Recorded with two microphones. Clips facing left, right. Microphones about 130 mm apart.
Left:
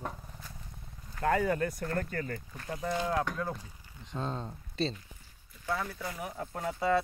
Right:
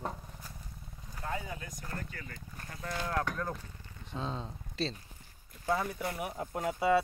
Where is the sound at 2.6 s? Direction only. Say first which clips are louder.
Left 6 dB; 25° left (ahead or behind).